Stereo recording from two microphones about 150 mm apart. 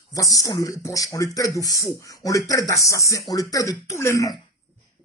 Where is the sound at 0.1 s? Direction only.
20° left (ahead or behind).